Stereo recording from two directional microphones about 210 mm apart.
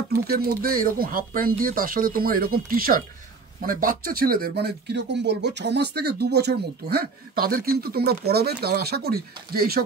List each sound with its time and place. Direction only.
0.3 s speech: 45° right (ahead or behind)